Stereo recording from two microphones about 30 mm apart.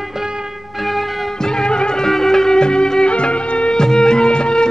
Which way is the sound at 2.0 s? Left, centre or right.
Centre.